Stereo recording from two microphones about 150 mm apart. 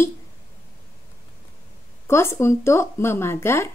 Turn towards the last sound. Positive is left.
turn(degrees=15)  # may be behind; listen again after turning